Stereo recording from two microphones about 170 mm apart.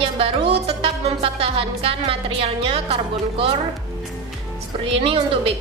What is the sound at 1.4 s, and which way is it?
A woman's voice, 35° right (ahead or behind).